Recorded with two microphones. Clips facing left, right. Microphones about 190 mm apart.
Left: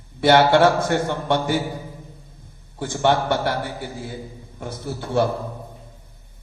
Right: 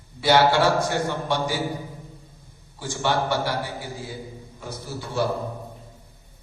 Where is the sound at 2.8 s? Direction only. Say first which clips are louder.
Left 5 dB; 55° left (ahead or behind).